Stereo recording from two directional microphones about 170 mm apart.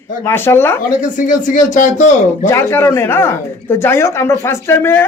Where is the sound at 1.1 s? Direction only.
50° left (ahead or behind).